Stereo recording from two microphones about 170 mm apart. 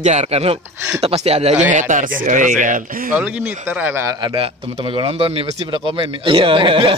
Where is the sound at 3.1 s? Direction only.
5° right (ahead or behind).